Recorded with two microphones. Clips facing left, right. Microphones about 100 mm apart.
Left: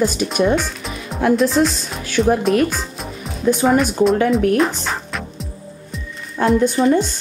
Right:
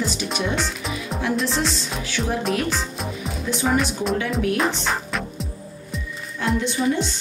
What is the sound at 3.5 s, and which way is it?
Speech, centre (ahead or behind).